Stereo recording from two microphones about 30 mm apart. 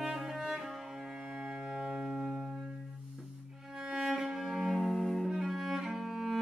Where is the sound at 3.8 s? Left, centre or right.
Centre.